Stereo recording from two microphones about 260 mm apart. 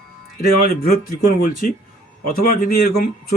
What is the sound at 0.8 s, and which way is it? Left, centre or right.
A man's voice, left.